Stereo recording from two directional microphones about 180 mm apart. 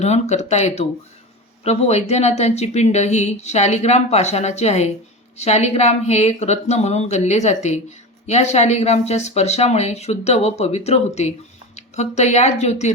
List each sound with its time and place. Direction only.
0.0 s speech: 40° left (ahead or behind)